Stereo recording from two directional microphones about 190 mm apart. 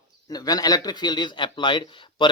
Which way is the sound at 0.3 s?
20° left (ahead or behind).